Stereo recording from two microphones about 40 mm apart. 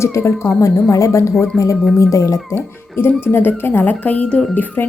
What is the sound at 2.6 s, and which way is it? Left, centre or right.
Speech, left.